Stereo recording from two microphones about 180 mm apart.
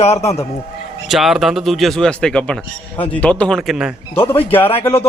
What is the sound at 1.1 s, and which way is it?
A man's voice, centre (ahead or behind).